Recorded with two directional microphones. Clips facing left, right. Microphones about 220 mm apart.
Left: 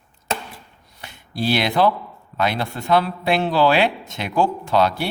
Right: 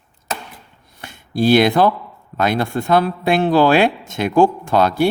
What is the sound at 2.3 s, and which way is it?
Speech, 50° right (ahead or behind).